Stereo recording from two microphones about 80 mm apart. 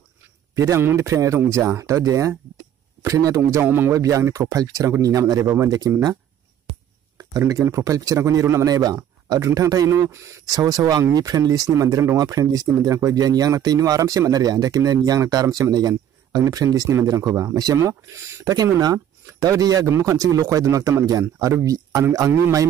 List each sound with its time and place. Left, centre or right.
0.6 s speech: right
3.9 s speech: right
7.2 s speech: right
9.4 s speech: right
9.7 s speech: right
9.9 s speech: right
10.4 s speech: right
18.4 s speech: right